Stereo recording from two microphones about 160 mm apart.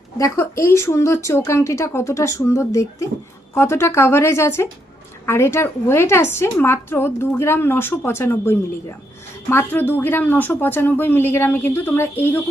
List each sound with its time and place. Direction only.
0.2 s speech: 20° left (ahead or behind)